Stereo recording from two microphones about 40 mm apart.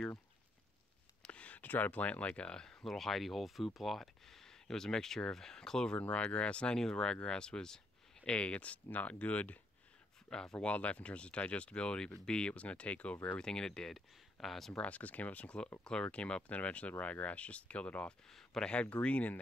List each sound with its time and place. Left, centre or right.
1.2 s a sound: left
1.7 s speech: left; by 2.8 s centre
2.8 s speech: centre
5.9 s speech: left
8.3 s speech: left
8.9 s speech: left
10.3 s speech: centre
10.7 s speech: left
13.4 s speech: centre
13.9 s speech: centre
14.7 s speech: left
15.8 s speech: centre
18.3 s speech: centre
18.7 s speech: left